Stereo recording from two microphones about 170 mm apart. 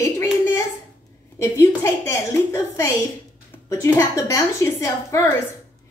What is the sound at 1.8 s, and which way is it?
A woman's voice, 15° left (ahead or behind).